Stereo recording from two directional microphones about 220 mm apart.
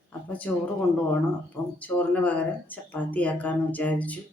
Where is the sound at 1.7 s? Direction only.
5° left (ahead or behind).